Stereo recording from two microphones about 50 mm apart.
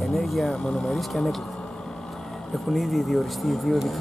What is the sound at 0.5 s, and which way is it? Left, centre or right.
Speech, centre.